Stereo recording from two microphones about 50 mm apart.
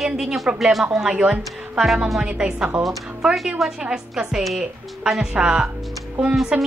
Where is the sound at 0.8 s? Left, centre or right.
Right.